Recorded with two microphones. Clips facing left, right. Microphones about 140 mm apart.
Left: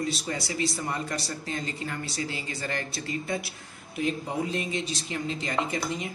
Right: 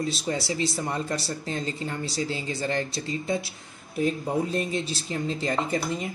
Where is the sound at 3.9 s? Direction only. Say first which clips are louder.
Right 4 dB; 40° right (ahead or behind).